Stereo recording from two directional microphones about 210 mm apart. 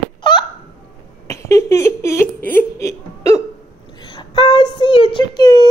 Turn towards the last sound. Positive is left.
turn(degrees=20)  # may be behind; listen again after turning